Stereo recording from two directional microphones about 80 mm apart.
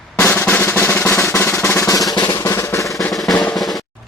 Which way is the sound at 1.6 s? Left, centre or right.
Left.